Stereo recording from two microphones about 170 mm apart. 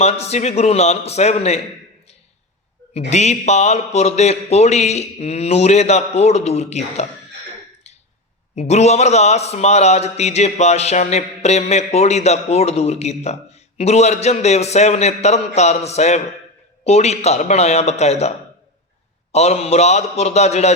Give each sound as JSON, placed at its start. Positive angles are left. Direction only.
{"t": 0.0, "sound": "a man's voice", "side_deg": 40}
{"t": 3.1, "sound": "a man's voice", "side_deg": 40}
{"t": 7.9, "sound": "a sound", "side_deg": 40}
{"t": 8.5, "sound": "a man's voice", "side_deg": 40}